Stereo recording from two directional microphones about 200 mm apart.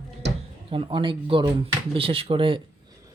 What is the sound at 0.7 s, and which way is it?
Speech, 25° right (ahead or behind).